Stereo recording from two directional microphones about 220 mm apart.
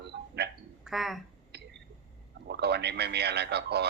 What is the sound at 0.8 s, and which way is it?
Speech, centre (ahead or behind).